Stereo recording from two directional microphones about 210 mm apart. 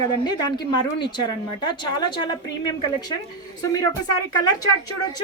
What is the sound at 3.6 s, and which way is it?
Speech, 15° left (ahead or behind).